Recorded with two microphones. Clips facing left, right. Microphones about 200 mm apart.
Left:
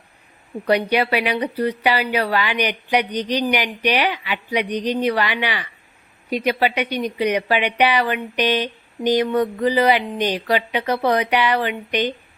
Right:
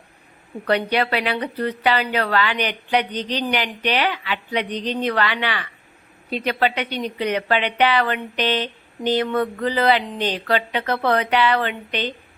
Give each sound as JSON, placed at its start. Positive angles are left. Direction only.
{"t": 0.6, "sound": "speech", "side_deg": 10}